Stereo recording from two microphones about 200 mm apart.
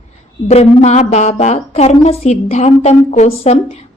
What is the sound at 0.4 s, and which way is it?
A woman's voice, 30° left (ahead or behind).